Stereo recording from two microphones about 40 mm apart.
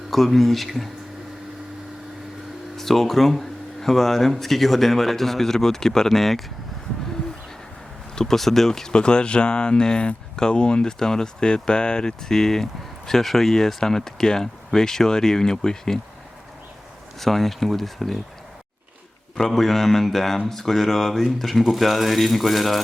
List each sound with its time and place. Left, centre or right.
0.1 s speech: centre
2.7 s speech: centre
8.1 s speech: centre
9.0 s speech: left
17.2 s speech: centre
19.4 s speech: centre